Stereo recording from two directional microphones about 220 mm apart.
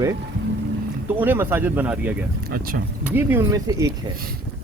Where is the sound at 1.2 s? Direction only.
10° right (ahead or behind).